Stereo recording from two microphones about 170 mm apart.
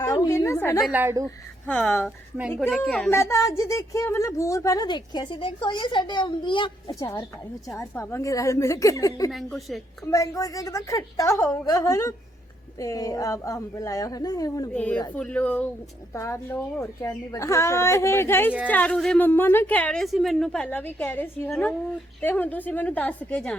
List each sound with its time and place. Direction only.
0.0 s a sound: 20° left (ahead or behind)
0.9 s speech: 10° right (ahead or behind)
1.6 s a woman's voice: 10° left (ahead or behind)
2.6 s speech: centre (ahead or behind)
3.1 s speech: 15° left (ahead or behind)
7.8 s speech: 15° left (ahead or behind)
9.3 s speech: centre (ahead or behind)
10.1 s speech: 20° left (ahead or behind)
14.7 s a woman's voice: 10° left (ahead or behind)